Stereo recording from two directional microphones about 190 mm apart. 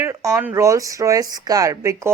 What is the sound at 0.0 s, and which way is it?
A woman's voice, 15° right (ahead or behind).